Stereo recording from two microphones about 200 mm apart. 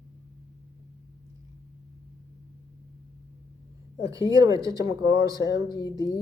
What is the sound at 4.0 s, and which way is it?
Speech, 15° right (ahead or behind).